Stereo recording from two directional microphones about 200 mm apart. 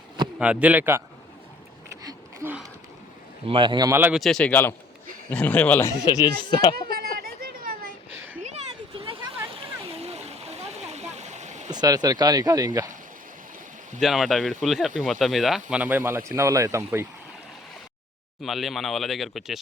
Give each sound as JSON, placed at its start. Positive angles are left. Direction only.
{"t": 0.3, "sound": "speech", "side_deg": -5}
{"t": 2.0, "sound": "a sound", "side_deg": -10}
{"t": 3.4, "sound": "speech", "side_deg": -25}
{"t": 6.9, "sound": "a sound", "side_deg": -50}
{"t": 9.9, "sound": "stream", "side_deg": -30}
{"t": 11.7, "sound": "speech", "side_deg": -20}
{"t": 14.0, "sound": "speech", "side_deg": 0}
{"t": 18.4, "sound": "speech", "side_deg": 0}